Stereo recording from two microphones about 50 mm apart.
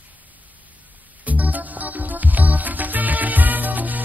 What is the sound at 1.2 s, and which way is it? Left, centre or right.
Music, right.